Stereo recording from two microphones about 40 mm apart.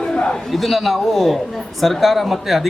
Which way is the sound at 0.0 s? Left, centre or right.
Left.